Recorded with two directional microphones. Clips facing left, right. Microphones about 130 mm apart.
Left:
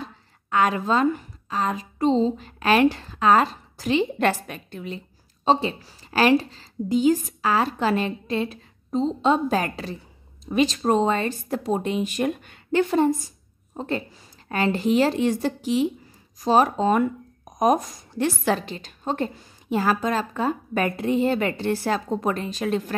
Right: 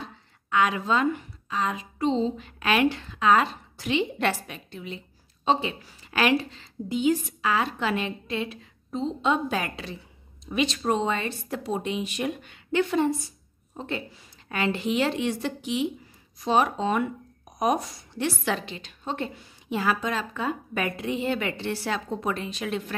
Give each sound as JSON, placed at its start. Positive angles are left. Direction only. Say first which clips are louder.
{"t": 0.0, "sound": "a woman's voice", "louder": "left 3 dB", "side_deg": 40}